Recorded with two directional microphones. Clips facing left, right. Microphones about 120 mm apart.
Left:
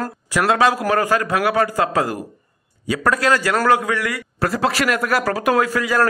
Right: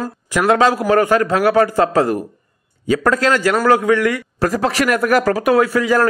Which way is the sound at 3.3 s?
25° right (ahead or behind).